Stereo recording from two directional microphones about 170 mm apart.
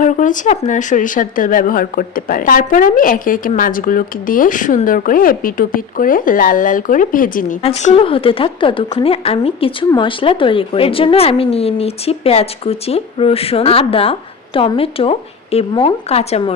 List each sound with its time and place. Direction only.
0.0 s speech: 50° left (ahead or behind)
7.6 s speech: 40° left (ahead or behind)